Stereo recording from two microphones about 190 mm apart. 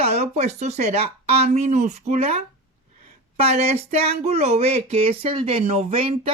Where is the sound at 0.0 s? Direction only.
35° right (ahead or behind).